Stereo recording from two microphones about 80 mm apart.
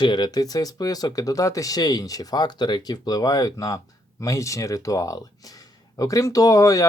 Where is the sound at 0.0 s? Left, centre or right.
Left.